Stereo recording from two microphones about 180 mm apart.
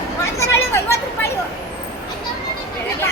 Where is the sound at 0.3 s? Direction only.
15° left (ahead or behind).